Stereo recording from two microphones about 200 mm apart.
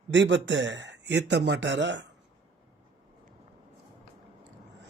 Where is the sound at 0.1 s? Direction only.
65° right (ahead or behind).